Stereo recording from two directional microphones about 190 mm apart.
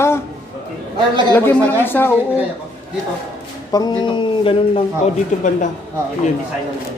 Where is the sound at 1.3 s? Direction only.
10° left (ahead or behind).